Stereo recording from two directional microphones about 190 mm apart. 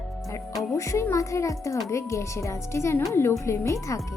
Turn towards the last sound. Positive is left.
turn(degrees=15)  # may be behind; listen again after turning